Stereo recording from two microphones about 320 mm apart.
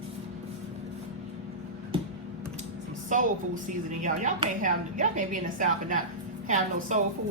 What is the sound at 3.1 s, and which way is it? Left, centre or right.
Speech, right.